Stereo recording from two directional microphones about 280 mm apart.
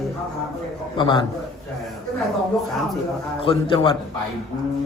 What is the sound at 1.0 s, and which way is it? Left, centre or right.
Speech, centre.